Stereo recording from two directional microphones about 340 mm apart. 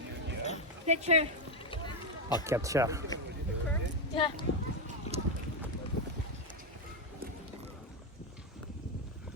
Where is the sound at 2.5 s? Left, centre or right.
Centre.